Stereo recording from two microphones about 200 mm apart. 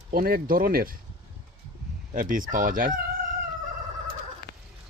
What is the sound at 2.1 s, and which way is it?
Speech, 45° right (ahead or behind).